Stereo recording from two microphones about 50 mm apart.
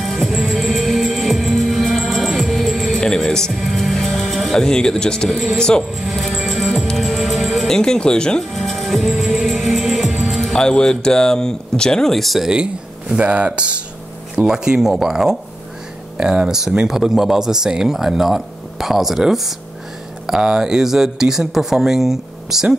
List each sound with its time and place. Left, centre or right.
0.0 s music: centre
3.0 s music: centre
3.5 s speech: centre
5.9 s music: centre
8.5 s music: centre
10.6 s speech: centre
13.1 s speech: right; by 22.8 s centre